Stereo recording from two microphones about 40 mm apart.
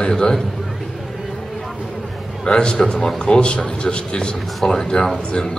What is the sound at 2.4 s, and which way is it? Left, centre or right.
A man's voice, left.